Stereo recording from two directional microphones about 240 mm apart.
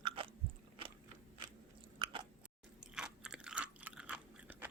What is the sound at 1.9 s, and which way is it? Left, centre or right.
Biting, centre.